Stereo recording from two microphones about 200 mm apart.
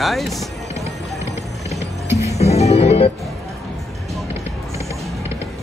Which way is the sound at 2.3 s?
30° left (ahead or behind).